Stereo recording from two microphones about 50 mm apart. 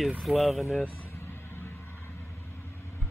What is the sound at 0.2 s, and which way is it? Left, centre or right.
Speech, centre.